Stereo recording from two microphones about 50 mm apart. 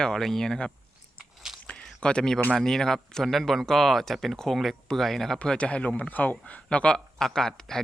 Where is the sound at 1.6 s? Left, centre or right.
Left.